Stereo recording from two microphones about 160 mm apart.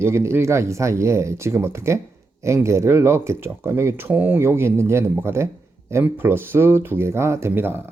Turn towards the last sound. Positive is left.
turn(degrees=-15)  # may be behind; listen again after turning